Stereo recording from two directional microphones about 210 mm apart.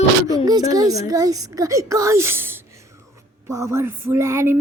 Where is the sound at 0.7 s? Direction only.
15° right (ahead or behind).